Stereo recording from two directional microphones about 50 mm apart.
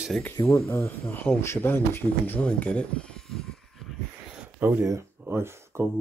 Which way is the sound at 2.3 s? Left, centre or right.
Left.